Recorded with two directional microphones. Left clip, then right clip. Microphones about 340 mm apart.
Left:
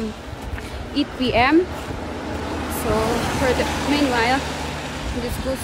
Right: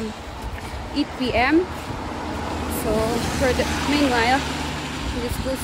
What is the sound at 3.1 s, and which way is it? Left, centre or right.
Speech, left.